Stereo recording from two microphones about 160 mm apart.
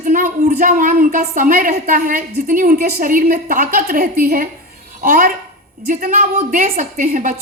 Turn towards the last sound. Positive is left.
turn(degrees=-55)  # may be behind; listen again after turning